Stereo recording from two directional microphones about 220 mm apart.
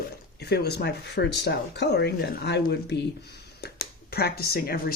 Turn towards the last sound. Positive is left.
turn(degrees=45)  # may be behind; listen again after turning